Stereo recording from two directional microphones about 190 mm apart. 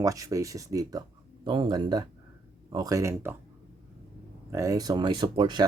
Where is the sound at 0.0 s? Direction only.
15° right (ahead or behind).